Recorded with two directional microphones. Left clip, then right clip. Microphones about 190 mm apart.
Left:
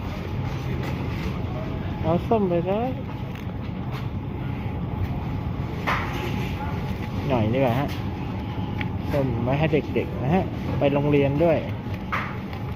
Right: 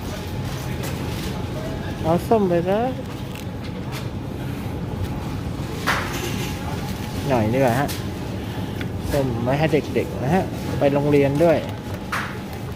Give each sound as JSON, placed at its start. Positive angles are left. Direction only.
{"t": 2.0, "sound": "speech", "side_deg": -20}
{"t": 7.3, "sound": "speech", "side_deg": -20}
{"t": 9.5, "sound": "speech", "side_deg": -15}